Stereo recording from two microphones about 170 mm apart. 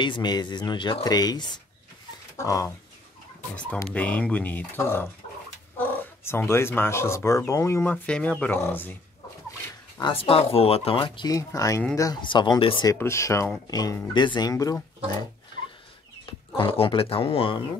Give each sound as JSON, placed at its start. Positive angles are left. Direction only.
{"t": 0.0, "sound": "speech", "side_deg": 25}
{"t": 3.9, "sound": "speech", "side_deg": 10}
{"t": 9.9, "sound": "speech", "side_deg": 30}
{"t": 12.9, "sound": "speech", "side_deg": 15}
{"t": 16.3, "sound": "speech", "side_deg": 30}